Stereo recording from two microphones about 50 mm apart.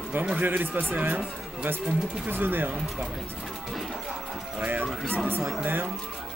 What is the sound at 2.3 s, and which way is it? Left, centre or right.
Speech, right.